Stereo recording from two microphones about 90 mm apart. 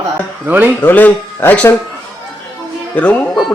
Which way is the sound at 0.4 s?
20° right (ahead or behind).